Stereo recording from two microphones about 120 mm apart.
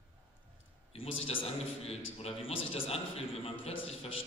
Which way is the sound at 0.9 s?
50° left (ahead or behind).